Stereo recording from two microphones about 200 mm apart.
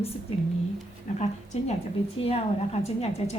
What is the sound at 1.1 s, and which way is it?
A woman's voice, 40° left (ahead or behind).